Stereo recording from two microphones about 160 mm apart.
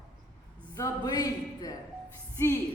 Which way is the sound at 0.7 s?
20° left (ahead or behind).